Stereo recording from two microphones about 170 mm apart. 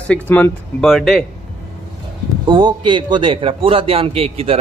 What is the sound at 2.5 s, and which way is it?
A man's voice, 25° right (ahead or behind).